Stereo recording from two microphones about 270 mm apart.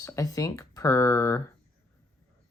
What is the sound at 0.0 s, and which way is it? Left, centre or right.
Speech, centre.